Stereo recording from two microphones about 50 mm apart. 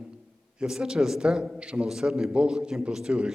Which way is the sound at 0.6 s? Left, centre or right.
Centre.